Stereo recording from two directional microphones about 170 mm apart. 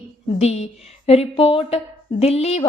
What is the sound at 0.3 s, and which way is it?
A woman's voice, 40° left (ahead or behind).